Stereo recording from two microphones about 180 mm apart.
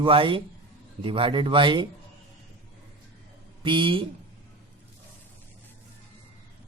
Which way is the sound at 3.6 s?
25° right (ahead or behind).